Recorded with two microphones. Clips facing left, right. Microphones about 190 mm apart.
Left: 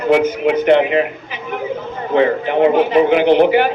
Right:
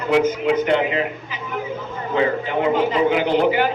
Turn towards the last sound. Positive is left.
turn(degrees=65)  # may be behind; listen again after turning